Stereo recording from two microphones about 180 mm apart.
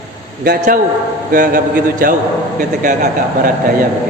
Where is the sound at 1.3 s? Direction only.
50° right (ahead or behind).